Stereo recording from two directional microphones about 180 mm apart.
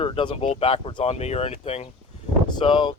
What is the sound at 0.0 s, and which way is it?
Speech, 30° left (ahead or behind).